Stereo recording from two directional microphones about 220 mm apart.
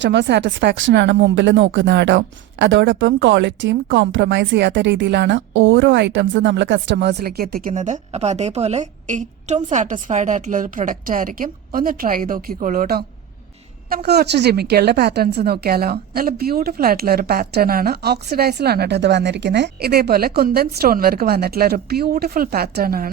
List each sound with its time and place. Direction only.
0.0 s a woman's voice: 55° right (ahead or behind)